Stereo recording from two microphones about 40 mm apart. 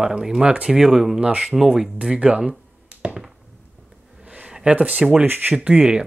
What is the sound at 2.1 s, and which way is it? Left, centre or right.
Speech, right.